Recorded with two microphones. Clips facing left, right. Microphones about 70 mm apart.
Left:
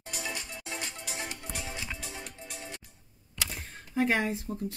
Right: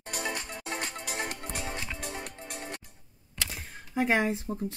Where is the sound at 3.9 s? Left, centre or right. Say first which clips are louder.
Right 1 dB; centre.